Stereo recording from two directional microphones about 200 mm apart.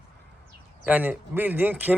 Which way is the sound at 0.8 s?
10° right (ahead or behind).